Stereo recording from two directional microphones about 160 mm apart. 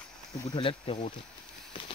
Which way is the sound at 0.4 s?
30° left (ahead or behind).